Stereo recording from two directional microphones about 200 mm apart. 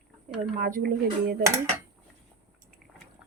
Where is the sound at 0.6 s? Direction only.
45° right (ahead or behind).